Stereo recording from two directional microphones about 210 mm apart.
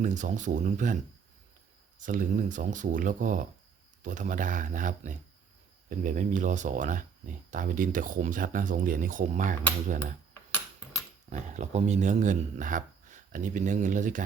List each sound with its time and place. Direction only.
0.0 s speech: 35° right (ahead or behind)
2.0 s speech: 40° right (ahead or behind)
11.3 s speech: 35° right (ahead or behind)